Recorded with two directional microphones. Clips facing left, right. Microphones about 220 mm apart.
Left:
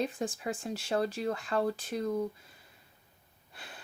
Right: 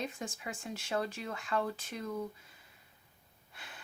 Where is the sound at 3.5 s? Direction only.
35° left (ahead or behind).